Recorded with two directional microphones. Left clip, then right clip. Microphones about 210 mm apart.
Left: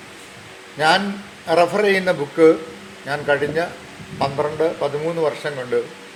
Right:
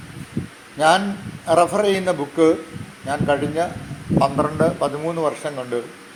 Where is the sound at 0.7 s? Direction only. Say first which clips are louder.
Right 1 dB; 30° right (ahead or behind).